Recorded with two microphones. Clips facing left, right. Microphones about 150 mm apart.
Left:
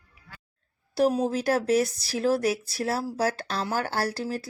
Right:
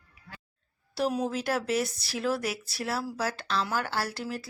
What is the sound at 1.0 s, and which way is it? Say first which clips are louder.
A woman's voice: left 5 dB; 35° left (ahead or behind).